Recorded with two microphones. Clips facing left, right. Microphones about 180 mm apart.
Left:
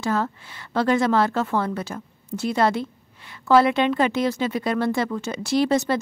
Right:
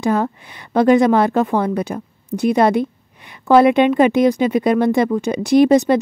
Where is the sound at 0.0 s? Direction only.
15° right (ahead or behind).